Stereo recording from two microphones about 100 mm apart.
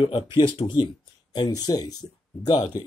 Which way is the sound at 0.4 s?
50° left (ahead or behind).